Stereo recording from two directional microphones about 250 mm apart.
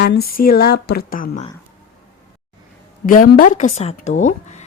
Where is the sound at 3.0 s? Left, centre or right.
Left.